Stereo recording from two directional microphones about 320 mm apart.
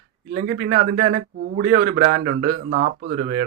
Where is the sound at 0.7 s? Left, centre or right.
Right.